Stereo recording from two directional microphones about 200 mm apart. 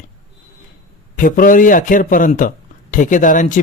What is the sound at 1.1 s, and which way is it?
A man's voice, 45° left (ahead or behind).